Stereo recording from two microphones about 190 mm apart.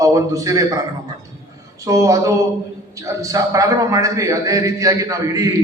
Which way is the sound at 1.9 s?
15° right (ahead or behind).